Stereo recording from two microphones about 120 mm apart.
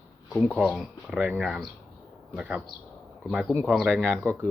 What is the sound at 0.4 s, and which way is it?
Speech, 5° right (ahead or behind).